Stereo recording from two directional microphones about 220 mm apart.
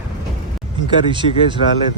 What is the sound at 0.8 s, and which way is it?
Speech, 20° right (ahead or behind).